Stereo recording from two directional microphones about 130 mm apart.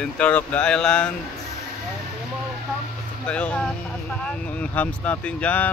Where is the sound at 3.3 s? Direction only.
10° left (ahead or behind).